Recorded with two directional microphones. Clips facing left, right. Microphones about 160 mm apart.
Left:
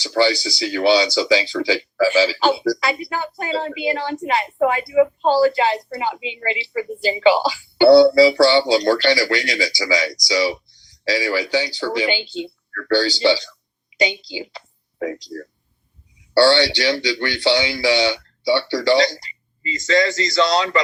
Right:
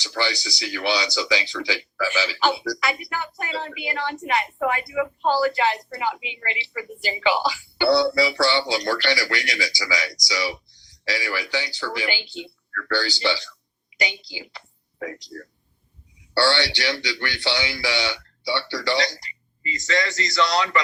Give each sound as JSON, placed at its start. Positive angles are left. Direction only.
{"t": 0.0, "sound": "a woman's voice", "side_deg": 25}
{"t": 16.3, "sound": "speech", "side_deg": 25}